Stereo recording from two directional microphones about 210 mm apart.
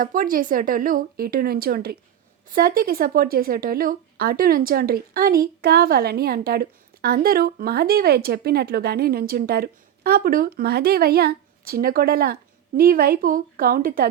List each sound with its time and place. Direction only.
0.0 s a woman's voice: 40° right (ahead or behind)